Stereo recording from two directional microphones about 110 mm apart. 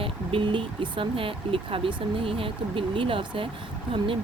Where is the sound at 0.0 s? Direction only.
55° right (ahead or behind).